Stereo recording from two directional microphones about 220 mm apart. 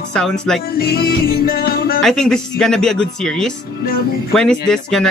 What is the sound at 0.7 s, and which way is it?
Speech, 45° left (ahead or behind).